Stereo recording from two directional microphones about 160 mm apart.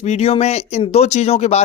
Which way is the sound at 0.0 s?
45° left (ahead or behind).